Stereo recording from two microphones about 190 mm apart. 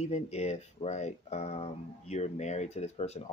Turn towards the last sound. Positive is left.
turn(degrees=35)  # may be behind; listen again after turning